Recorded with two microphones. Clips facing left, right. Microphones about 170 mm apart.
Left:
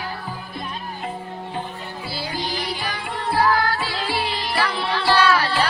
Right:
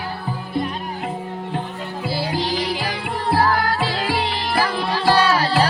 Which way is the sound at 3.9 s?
45° right (ahead or behind).